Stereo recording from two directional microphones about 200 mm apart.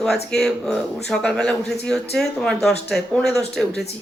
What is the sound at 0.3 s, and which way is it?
Speech, centre (ahead or behind).